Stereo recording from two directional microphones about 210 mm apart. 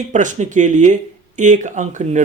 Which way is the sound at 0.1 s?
35° right (ahead or behind).